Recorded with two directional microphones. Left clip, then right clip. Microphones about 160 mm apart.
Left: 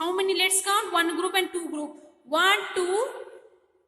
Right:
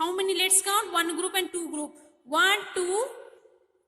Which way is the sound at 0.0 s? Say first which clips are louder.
Left 2 dB; 20° right (ahead or behind).